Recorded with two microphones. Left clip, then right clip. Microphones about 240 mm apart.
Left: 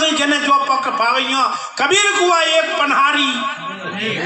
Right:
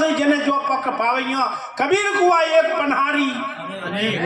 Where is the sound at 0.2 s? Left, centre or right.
Left.